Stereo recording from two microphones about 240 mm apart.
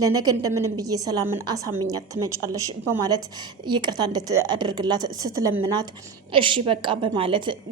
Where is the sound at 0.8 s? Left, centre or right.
Centre.